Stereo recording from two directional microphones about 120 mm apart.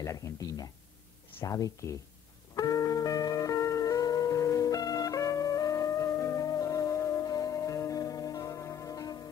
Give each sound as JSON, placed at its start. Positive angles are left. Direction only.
{"t": 0.0, "sound": "speech", "side_deg": 25}
{"t": 2.5, "sound": "music", "side_deg": 30}